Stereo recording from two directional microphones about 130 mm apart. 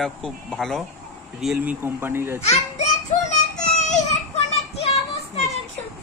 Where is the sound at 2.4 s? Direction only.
55° left (ahead or behind).